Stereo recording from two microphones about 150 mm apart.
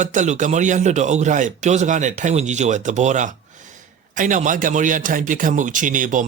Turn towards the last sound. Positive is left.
turn(degrees=-60)  # may be behind; listen again after turning